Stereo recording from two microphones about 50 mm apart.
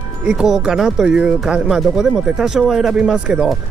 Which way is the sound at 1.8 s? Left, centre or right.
Centre.